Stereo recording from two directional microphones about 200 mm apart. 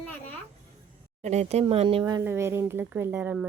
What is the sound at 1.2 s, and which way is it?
Speech, 35° right (ahead or behind).